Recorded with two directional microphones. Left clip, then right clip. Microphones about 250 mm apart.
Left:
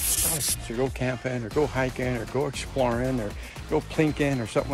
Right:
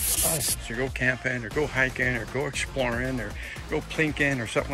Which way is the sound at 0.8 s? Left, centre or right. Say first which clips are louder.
Right 2 dB; centre.